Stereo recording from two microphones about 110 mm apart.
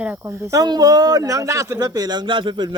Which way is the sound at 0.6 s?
35° right (ahead or behind).